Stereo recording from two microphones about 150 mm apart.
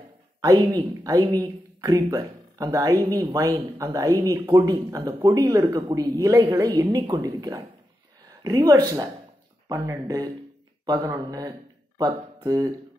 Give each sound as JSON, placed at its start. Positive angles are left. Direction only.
{"t": 0.4, "sound": "speech", "side_deg": -25}